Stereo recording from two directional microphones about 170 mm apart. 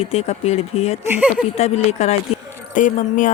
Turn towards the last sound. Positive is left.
turn(degrees=50)  # may be behind; listen again after turning